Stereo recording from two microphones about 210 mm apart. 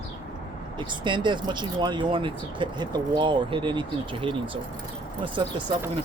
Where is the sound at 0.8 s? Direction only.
20° right (ahead or behind).